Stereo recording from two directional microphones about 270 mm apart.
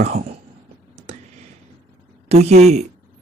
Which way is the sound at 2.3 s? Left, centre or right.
Right.